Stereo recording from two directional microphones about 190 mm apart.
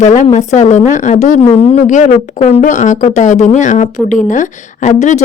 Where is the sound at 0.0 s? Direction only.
40° left (ahead or behind).